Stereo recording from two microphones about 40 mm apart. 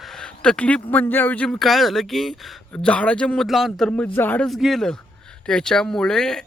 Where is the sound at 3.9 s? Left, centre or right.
Left.